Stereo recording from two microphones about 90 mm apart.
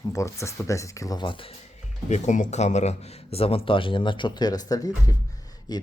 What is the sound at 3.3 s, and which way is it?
Speech, 90° left.